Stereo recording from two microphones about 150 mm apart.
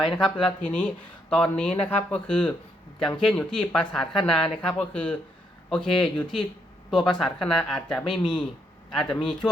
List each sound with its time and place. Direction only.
0.2 s speech: 5° left (ahead or behind)
8.0 s speech: 35° left (ahead or behind)
8.9 s speech: centre (ahead or behind)